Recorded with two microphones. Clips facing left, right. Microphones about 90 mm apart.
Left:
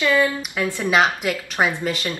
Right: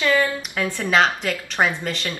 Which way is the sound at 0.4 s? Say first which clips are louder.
Left 1 dB; 10° left (ahead or behind).